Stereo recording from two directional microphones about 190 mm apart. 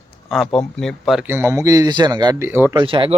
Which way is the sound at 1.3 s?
15° right (ahead or behind).